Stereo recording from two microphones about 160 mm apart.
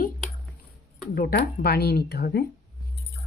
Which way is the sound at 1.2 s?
75° left (ahead or behind).